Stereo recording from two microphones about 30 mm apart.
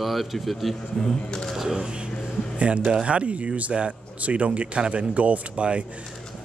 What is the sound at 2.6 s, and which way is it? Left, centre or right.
Speech, right.